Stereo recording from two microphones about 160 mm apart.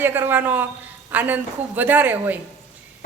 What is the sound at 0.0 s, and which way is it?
A woman's voice, 15° right (ahead or behind).